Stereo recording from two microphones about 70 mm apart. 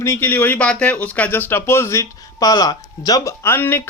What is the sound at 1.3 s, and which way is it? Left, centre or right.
Speech, left.